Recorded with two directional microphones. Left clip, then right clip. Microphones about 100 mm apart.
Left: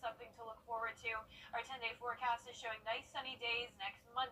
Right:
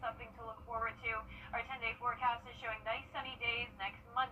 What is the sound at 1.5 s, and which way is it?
A woman's voice, 35° left (ahead or behind).